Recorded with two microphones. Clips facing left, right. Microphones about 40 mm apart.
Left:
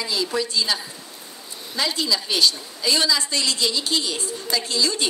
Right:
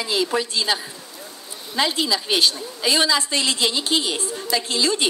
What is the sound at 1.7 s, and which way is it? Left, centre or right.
A woman's voice, right.